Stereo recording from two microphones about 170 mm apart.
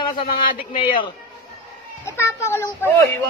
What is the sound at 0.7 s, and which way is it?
Speech, 30° left (ahead or behind).